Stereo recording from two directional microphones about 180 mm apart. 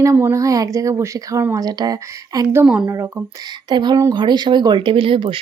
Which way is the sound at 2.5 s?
5° right (ahead or behind).